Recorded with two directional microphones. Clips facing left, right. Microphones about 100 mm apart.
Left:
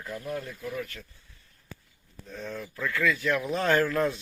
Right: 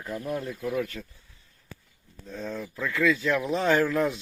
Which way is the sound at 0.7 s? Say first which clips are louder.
Right 7 dB; 40° right (ahead or behind).